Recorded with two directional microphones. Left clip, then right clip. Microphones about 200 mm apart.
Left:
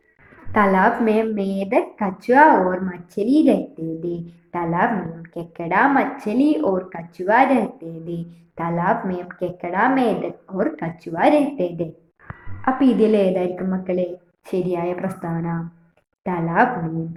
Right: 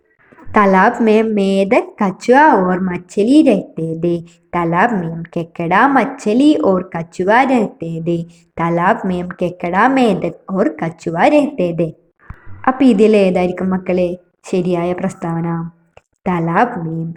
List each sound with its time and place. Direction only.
0.5 s speech: 35° right (ahead or behind)